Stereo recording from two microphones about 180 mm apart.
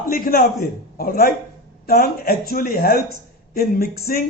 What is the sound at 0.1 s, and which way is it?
A man's voice, 55° left (ahead or behind).